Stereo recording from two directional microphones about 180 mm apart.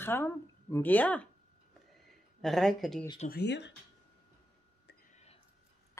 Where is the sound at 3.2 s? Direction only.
70° left (ahead or behind).